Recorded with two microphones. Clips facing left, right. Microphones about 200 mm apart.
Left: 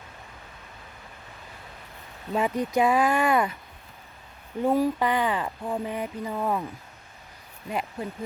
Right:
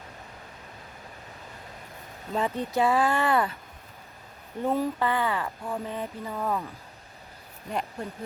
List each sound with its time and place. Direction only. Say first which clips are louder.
2.3 s speech: left 3 dB; 15° left (ahead or behind)
4.6 s speech: left 3 dB; 10° left (ahead or behind)
7.7 s speech: left 1 dB; 5° left (ahead or behind)